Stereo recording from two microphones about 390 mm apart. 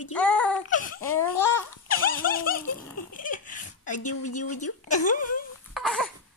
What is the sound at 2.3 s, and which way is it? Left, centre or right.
A woman's voice, left.